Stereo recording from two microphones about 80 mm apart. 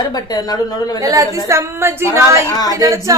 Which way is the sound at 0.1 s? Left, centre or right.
Left.